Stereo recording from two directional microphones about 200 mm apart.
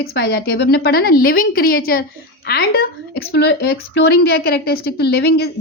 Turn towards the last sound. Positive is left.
turn(degrees=55)  # may be behind; listen again after turning